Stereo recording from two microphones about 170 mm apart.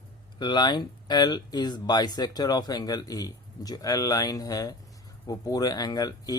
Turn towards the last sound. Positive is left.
turn(degrees=25)  # may be behind; listen again after turning